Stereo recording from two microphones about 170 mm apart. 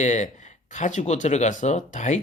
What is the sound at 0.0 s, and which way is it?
Speech, 45° left (ahead or behind).